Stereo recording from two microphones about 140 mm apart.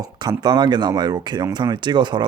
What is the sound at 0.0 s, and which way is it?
Speech, 30° right (ahead or behind).